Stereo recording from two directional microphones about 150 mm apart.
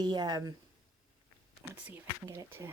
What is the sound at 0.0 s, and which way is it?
Speech, 25° right (ahead or behind).